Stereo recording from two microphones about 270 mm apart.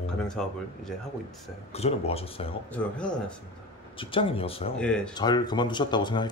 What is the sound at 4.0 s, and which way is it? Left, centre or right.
Speech, centre.